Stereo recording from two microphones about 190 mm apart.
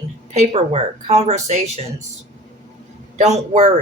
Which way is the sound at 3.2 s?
35° right (ahead or behind).